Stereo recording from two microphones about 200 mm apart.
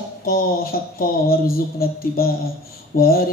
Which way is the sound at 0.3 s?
50° left (ahead or behind).